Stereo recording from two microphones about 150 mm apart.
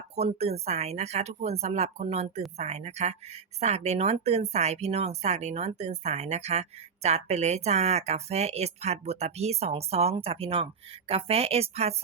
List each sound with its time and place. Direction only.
0.2 s speech: 45° right (ahead or behind)